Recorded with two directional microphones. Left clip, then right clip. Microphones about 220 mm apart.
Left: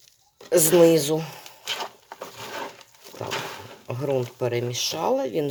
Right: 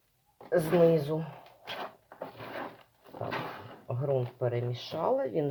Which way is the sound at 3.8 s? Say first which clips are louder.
Left 5 dB; 50° left (ahead or behind).